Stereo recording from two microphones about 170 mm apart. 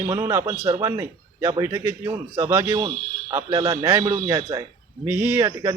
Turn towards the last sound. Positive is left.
turn(degrees=-15)  # may be behind; listen again after turning